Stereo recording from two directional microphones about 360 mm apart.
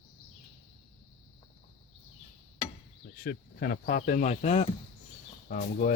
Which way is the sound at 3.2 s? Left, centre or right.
Left.